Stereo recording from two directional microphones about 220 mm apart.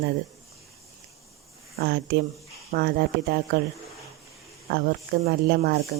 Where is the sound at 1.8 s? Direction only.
45° right (ahead or behind).